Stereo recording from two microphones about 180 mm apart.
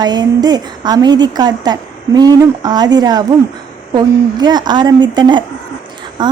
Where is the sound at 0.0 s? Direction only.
25° right (ahead or behind).